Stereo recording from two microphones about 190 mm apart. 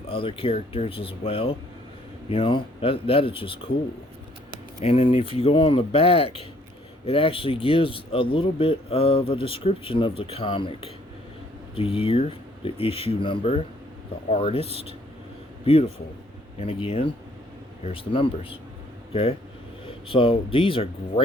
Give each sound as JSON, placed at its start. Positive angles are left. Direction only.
{"t": 0.1, "sound": "speech", "side_deg": 30}
{"t": 4.8, "sound": "speech", "side_deg": 30}
{"t": 20.1, "sound": "speech", "side_deg": 30}